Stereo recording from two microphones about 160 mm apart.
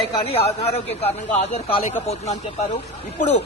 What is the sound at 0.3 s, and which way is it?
Speech, 40° left (ahead or behind).